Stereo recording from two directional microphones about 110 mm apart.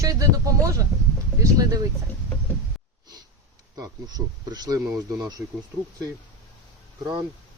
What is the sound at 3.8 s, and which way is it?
Speech, 40° right (ahead or behind).